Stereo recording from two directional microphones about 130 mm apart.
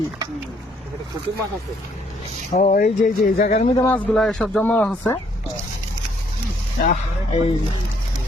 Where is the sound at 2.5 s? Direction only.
75° left (ahead or behind).